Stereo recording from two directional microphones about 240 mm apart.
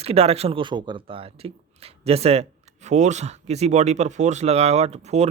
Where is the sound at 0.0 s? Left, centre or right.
Right.